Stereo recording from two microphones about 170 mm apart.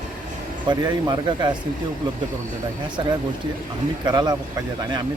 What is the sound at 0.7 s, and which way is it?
Speech, 25° right (ahead or behind).